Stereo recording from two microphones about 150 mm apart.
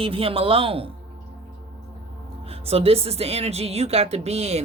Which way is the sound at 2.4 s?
40° right (ahead or behind).